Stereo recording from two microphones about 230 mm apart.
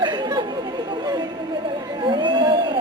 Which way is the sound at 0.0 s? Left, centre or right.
Centre.